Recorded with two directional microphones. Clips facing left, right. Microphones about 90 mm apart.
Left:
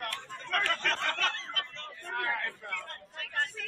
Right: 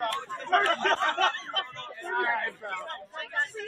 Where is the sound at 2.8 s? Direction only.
30° right (ahead or behind).